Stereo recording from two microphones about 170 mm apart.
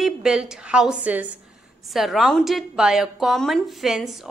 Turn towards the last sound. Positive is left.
turn(degrees=0)  # may be behind; listen again after turning